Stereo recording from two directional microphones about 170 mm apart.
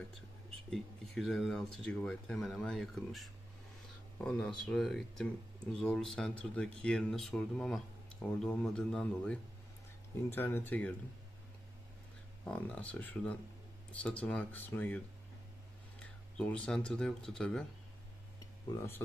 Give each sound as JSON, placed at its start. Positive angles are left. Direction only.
{"t": 0.7, "sound": "speech", "side_deg": 0}
{"t": 12.4, "sound": "speech", "side_deg": 5}
{"t": 16.0, "sound": "speech", "side_deg": 5}
{"t": 18.8, "sound": "speech", "side_deg": 15}